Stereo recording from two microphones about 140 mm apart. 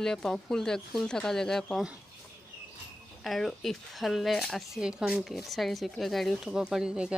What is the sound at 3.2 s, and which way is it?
Speech, centre (ahead or behind).